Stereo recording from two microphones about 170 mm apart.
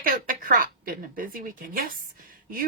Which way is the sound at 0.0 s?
55° right (ahead or behind).